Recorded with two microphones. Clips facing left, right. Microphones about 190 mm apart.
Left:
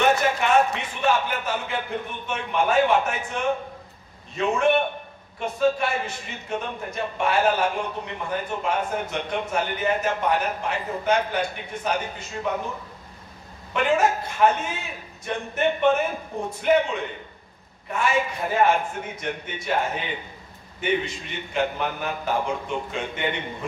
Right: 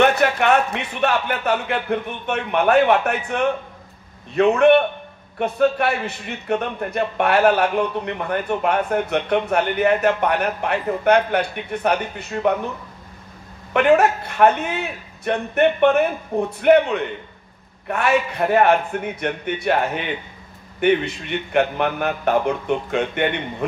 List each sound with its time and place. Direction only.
0.0 s a man's voice: 65° right (ahead or behind)
13.7 s a man's voice: 65° right (ahead or behind)